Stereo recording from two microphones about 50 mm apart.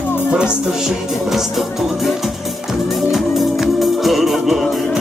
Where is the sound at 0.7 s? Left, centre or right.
Centre.